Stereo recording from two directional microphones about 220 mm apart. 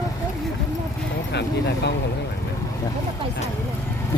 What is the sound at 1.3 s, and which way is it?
Speech, 50° left (ahead or behind).